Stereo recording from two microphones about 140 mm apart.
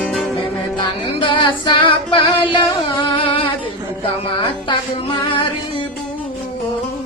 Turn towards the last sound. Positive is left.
turn(degrees=35)  # may be behind; listen again after turning